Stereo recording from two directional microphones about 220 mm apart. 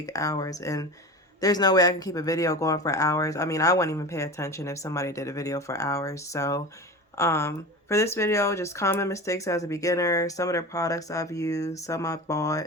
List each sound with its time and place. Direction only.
0.0 s speech: 15° left (ahead or behind)